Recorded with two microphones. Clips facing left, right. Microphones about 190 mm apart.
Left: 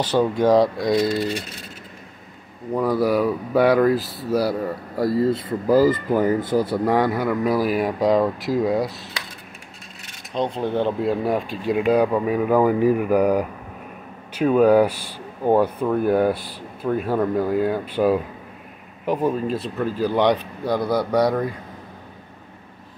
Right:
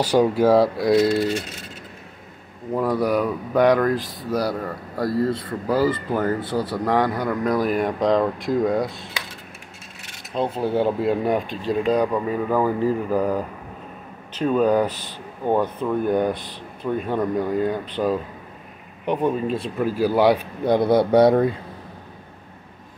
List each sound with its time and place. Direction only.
0.0 s speech: 10° right (ahead or behind)
2.7 s speech: centre (ahead or behind)
10.3 s speech: 5° right (ahead or behind)
20.6 s speech: 25° right (ahead or behind)